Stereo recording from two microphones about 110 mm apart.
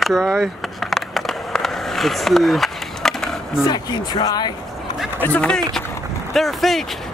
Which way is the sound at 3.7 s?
40° left (ahead or behind).